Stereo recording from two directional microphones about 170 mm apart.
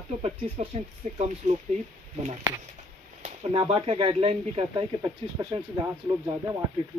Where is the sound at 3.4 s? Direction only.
30° right (ahead or behind).